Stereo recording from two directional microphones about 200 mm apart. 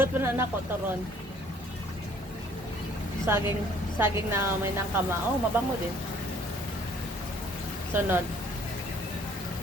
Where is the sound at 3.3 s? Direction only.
10° right (ahead or behind).